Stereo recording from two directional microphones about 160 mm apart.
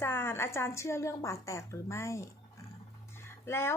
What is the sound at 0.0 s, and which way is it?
A woman's voice, 15° left (ahead or behind).